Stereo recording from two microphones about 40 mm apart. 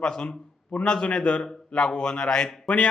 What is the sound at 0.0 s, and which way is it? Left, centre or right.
Speech, left.